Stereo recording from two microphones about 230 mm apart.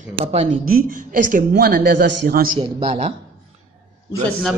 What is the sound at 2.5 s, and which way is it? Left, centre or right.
Speech, right.